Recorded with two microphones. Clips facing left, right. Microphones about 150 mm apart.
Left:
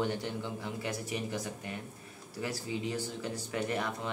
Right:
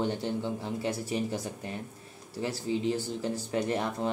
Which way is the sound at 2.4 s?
30° right (ahead or behind).